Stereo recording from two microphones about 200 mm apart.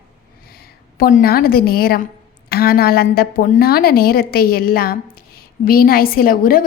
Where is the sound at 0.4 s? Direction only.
50° left (ahead or behind).